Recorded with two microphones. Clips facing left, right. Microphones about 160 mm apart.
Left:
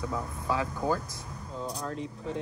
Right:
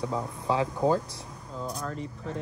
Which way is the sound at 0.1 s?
25° right (ahead or behind).